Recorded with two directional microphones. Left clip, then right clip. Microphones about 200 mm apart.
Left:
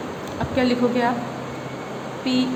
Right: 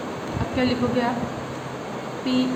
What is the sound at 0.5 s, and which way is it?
Speech, 35° left (ahead or behind).